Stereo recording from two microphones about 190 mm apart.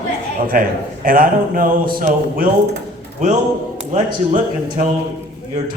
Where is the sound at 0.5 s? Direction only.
45° right (ahead or behind).